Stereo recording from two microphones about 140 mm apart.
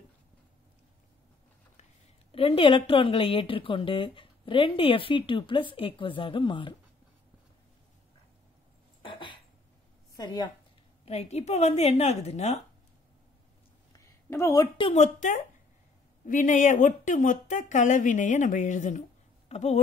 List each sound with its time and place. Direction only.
2.3 s speech: 40° left (ahead or behind)
9.0 s a sound: 35° left (ahead or behind)
10.1 s a woman's voice: 30° left (ahead or behind)
11.1 s a woman's voice: 50° left (ahead or behind)
13.9 s a sound: 20° left (ahead or behind)
14.8 s a woman's voice: 40° left (ahead or behind)
15.1 s a woman's voice: 65° left (ahead or behind)
19.5 s a woman's voice: 50° left (ahead or behind)